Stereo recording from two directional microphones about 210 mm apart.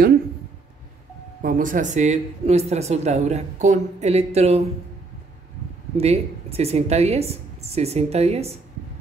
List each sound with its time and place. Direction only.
1.4 s speech: 40° right (ahead or behind)
5.9 s a woman's voice: 30° right (ahead or behind)